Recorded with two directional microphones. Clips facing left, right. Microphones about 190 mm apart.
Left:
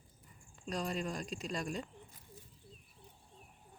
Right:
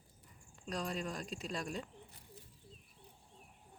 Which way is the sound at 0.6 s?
Centre (ahead or behind).